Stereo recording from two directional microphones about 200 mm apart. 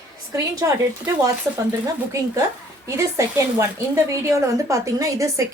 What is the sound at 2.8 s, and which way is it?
Speech, 15° right (ahead or behind).